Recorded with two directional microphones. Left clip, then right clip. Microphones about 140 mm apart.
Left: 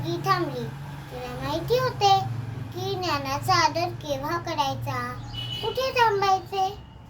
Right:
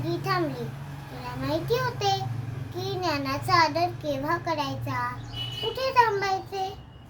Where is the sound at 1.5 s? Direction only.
20° right (ahead or behind).